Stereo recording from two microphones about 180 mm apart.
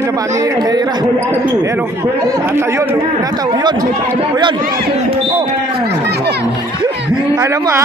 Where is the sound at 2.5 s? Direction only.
15° right (ahead or behind).